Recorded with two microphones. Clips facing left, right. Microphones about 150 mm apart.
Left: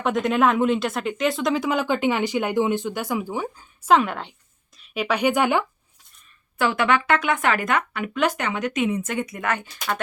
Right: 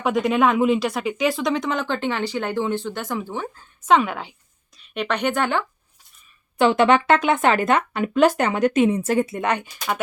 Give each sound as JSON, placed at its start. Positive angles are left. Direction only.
{"t": 0.0, "sound": "speech", "side_deg": 0}
{"t": 6.6, "sound": "speech", "side_deg": -25}